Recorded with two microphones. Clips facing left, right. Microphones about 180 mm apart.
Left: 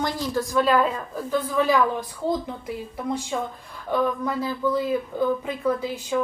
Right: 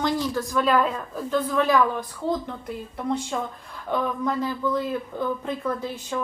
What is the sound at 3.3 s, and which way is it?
A woman's voice, 5° left (ahead or behind).